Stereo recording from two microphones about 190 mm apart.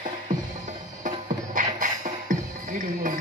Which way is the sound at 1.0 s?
45° right (ahead or behind).